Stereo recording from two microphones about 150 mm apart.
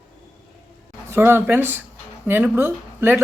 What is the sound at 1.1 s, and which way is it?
Speech, 15° right (ahead or behind).